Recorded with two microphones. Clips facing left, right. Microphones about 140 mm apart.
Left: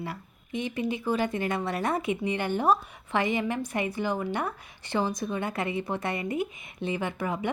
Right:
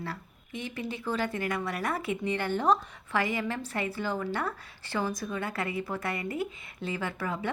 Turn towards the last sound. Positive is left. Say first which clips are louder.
# left 3 dB
turn(degrees=20)  # may be behind; listen again after turning